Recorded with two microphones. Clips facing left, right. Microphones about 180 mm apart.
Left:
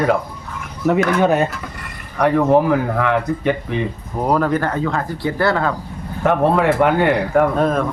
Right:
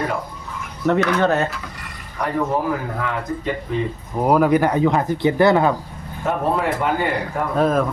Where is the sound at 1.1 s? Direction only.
10° left (ahead or behind).